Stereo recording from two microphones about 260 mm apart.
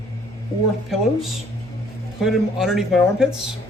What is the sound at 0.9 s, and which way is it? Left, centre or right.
Speech, centre.